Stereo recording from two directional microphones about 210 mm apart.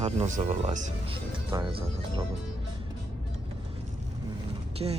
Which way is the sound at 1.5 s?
15° right (ahead or behind).